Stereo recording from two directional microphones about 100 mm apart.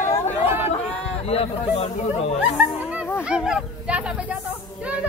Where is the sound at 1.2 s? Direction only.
80° left.